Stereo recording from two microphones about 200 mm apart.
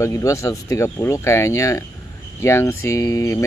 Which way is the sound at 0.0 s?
15° left (ahead or behind).